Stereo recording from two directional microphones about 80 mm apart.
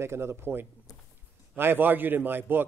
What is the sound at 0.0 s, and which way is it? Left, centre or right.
Speech, right.